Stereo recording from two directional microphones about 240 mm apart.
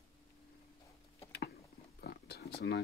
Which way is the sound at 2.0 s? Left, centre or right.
Left.